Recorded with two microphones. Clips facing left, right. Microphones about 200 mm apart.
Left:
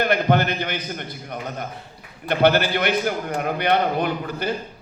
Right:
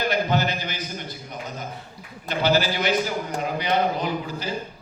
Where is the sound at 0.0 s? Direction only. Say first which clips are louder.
Left 4 dB; 60° left (ahead or behind).